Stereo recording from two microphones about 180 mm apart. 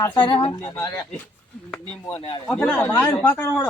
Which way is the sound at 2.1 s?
30° left (ahead or behind).